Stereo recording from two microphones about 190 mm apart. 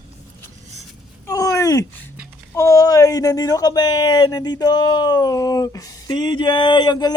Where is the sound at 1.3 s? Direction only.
15° left (ahead or behind).